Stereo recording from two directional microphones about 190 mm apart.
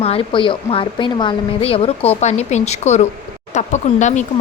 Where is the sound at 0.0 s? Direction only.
30° left (ahead or behind).